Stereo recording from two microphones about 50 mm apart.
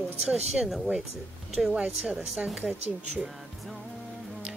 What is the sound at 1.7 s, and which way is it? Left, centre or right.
Speech, right.